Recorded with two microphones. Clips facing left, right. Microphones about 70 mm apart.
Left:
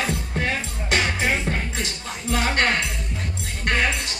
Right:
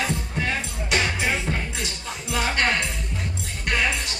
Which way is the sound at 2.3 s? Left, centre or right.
Left.